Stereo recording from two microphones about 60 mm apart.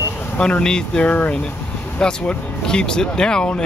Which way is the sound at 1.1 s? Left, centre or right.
Left.